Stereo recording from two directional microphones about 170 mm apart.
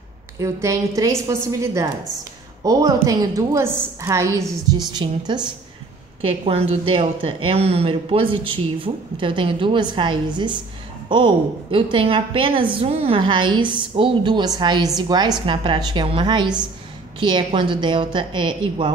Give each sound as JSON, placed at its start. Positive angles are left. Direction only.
{"t": 0.4, "sound": "a woman's voice", "side_deg": -20}
{"t": 6.4, "sound": "a woman's voice", "side_deg": -35}